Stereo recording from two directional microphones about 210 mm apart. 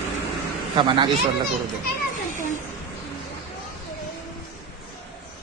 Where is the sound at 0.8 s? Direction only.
20° right (ahead or behind).